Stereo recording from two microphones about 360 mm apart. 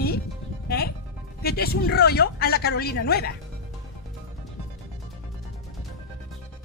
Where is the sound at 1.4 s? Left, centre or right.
Left.